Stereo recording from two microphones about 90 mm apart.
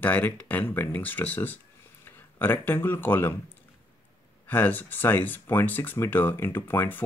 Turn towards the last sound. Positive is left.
turn(degrees=20)  # may be behind; listen again after turning